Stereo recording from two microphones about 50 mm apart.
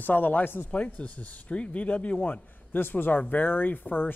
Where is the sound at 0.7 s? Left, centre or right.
Left.